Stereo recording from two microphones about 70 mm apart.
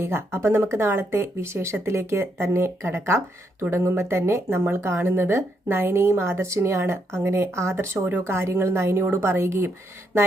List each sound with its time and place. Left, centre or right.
0.0 s speech: right